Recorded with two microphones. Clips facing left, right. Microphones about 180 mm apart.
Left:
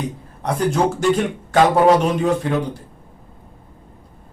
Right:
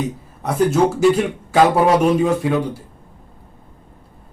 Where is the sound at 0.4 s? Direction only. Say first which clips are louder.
Right 3 dB; 5° right (ahead or behind).